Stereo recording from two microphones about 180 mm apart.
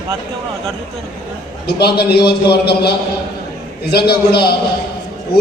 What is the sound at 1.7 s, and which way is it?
A man's voice, 65° left (ahead or behind).